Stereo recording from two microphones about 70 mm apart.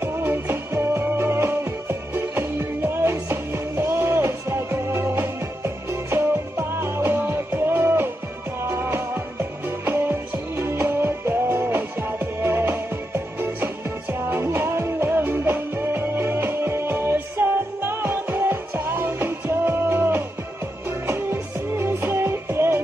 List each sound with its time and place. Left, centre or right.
0.0 s music: right